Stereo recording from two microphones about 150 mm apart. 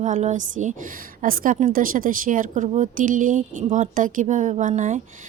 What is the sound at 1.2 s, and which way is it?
Speech, 70° right (ahead or behind).